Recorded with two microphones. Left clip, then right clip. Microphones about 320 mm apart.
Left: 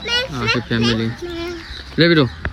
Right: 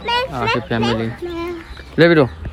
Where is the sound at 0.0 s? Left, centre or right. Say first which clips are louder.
Right 1 dB; centre.